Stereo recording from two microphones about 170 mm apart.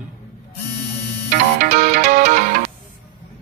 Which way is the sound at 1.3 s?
50° right (ahead or behind).